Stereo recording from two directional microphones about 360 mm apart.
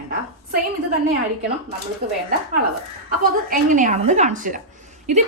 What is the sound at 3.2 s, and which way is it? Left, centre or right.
A woman's voice, right.